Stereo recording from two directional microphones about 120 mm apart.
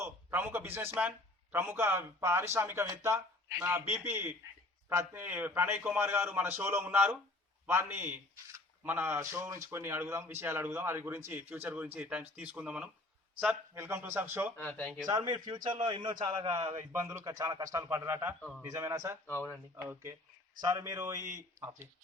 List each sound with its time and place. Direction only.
0.0 s a man's voice: 20° right (ahead or behind)
14.6 s speech: 10° left (ahead or behind)
15.0 s a man's voice: 35° right (ahead or behind)
16.6 s a man's voice: 25° right (ahead or behind)
18.3 s speech: 10° left (ahead or behind)
18.7 s a man's voice: 25° right (ahead or behind)
19.2 s speech: 20° left (ahead or behind)
19.7 s a man's voice: 20° right (ahead or behind)